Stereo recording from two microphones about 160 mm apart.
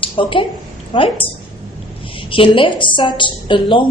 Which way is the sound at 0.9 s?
35° left (ahead or behind).